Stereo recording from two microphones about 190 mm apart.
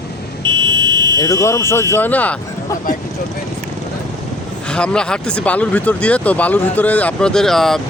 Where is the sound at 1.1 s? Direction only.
20° left (ahead or behind).